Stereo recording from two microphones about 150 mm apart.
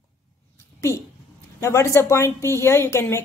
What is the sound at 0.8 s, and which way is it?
A woman's voice, 20° left (ahead or behind).